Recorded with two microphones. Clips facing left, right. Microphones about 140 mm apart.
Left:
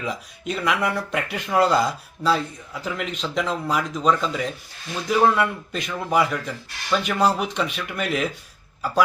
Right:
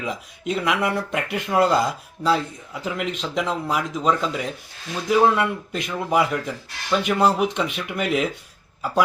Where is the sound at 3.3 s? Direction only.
15° right (ahead or behind).